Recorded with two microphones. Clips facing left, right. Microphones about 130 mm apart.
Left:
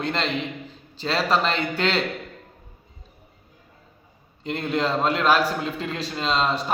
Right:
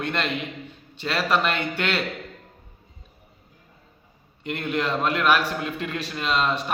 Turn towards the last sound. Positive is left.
turn(degrees=25)  # may be behind; listen again after turning